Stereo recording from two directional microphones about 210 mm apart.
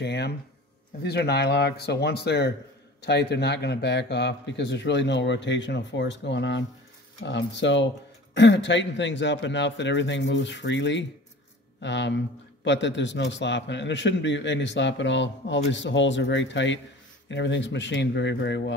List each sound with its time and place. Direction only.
0.0 s a man's voice: 55° left (ahead or behind)